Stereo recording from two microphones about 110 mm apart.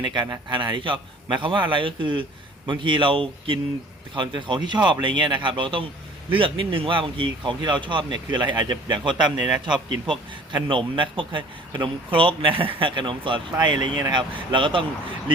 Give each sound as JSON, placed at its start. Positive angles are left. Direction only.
{"t": 0.0, "sound": "a man's voice", "side_deg": -40}
{"t": 9.4, "sound": "a man's voice", "side_deg": -5}
{"t": 10.1, "sound": "a man's voice", "side_deg": -50}